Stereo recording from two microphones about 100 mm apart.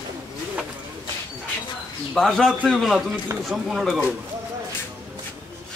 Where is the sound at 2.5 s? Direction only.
10° right (ahead or behind).